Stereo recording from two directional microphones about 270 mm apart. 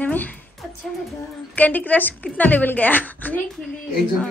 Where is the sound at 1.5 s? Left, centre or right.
Centre.